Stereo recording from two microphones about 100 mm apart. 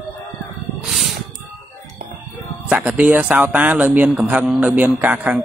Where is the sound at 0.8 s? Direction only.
Centre (ahead or behind).